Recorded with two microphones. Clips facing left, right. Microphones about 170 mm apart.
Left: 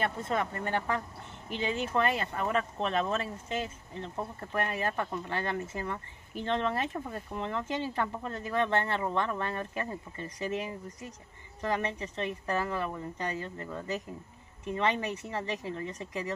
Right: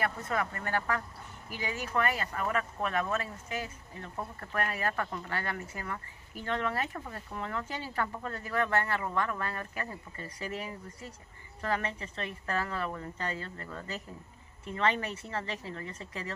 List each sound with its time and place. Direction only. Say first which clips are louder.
0.0 s speech: left 1 dB; 25° left (ahead or behind)